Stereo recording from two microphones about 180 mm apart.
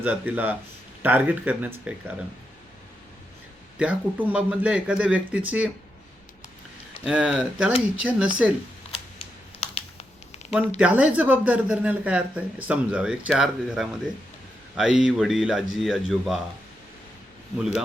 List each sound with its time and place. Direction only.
0.0 s speech: 10° right (ahead or behind)
3.8 s speech: 10° right (ahead or behind)
7.0 s speech: 5° right (ahead or behind)
8.9 s typing: 30° left (ahead or behind)
10.8 s speech: 5° right (ahead or behind)